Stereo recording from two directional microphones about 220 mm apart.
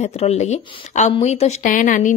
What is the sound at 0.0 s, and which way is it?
A woman's voice, 30° left (ahead or behind).